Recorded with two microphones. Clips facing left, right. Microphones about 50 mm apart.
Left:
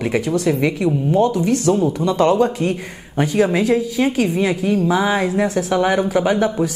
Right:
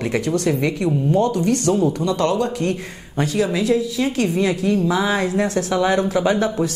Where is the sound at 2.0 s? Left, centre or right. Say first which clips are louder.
Left 4 dB; left.